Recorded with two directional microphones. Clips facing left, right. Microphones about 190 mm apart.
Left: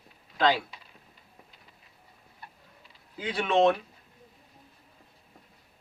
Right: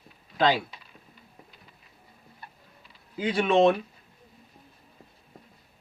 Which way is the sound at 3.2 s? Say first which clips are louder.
Right 3 dB; 10° right (ahead or behind).